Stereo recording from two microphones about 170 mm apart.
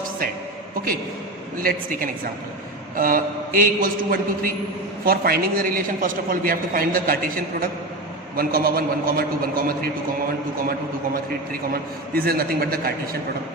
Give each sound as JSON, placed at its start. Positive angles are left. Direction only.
{"t": 1.5, "sound": "a man's voice", "side_deg": -55}
{"t": 12.1, "sound": "a man's voice", "side_deg": -60}